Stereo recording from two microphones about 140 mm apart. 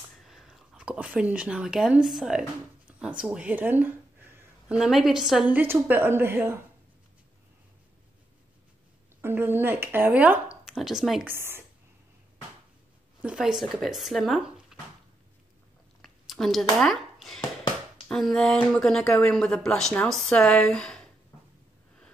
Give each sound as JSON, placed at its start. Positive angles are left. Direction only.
{"t": 0.3, "sound": "speech", "side_deg": 0}
{"t": 3.0, "sound": "a sound", "side_deg": -5}
{"t": 4.7, "sound": "a woman's voice", "side_deg": -5}
{"t": 9.2, "sound": "speech", "side_deg": -15}
{"t": 11.2, "sound": "a woman's voice", "side_deg": -15}
{"t": 13.2, "sound": "speech", "side_deg": -5}
{"t": 16.0, "sound": "chewing", "side_deg": 0}
{"t": 16.7, "sound": "speech", "side_deg": 0}